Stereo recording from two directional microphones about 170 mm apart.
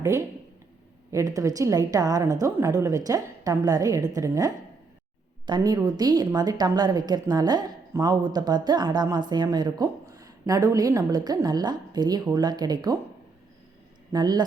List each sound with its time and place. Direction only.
0.0 s a woman's voice: 15° right (ahead or behind)
14.1 s a woman's voice: 25° right (ahead or behind)